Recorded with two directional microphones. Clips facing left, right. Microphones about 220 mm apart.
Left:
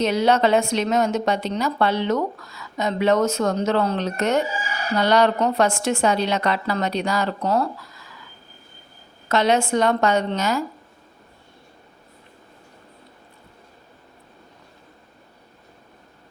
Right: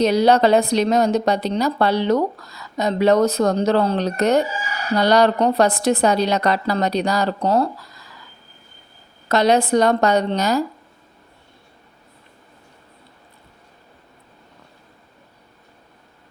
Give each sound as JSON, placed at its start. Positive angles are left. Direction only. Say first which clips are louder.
{"t": 0.0, "sound": "a woman's voice", "louder": "right 4 dB", "side_deg": -35}
{"t": 9.3, "sound": "a woman's voice", "louder": "right 3 dB", "side_deg": -35}